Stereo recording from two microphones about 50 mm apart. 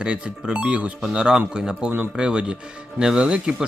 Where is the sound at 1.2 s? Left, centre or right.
Centre.